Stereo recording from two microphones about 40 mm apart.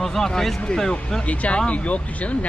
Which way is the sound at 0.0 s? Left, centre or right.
Centre.